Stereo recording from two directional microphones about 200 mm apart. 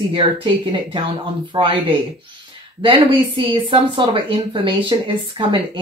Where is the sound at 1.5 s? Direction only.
25° right (ahead or behind).